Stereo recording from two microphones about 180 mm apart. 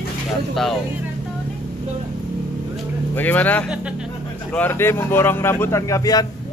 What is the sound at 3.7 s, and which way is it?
Speech, 5° right (ahead or behind).